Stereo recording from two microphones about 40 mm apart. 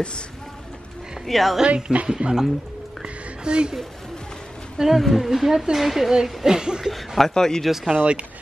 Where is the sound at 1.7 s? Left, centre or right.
Right.